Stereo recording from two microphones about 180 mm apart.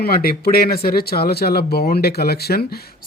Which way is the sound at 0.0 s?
60° left (ahead or behind).